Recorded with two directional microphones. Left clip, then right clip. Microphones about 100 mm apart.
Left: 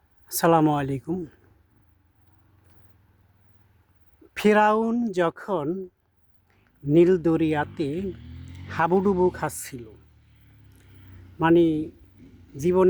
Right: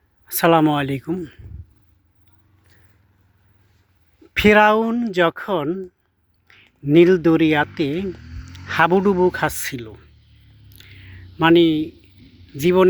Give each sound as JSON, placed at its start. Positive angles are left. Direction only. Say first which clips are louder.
{"t": 0.3, "sound": "speech", "louder": "right 4 dB", "side_deg": 0}
{"t": 4.4, "sound": "speech", "louder": "right 6 dB", "side_deg": -15}
{"t": 6.5, "sound": "speech", "louder": "right 6 dB", "side_deg": -20}
{"t": 8.5, "sound": "speech", "louder": "right 6 dB", "side_deg": -25}
{"t": 10.8, "sound": "a sound", "louder": "right 17 dB", "side_deg": -25}
{"t": 11.3, "sound": "speech", "louder": "right 5 dB", "side_deg": -25}
{"t": 12.2, "sound": "a sound", "louder": "right 2 dB", "side_deg": -5}
{"t": 12.5, "sound": "speech", "louder": "right 5 dB", "side_deg": -20}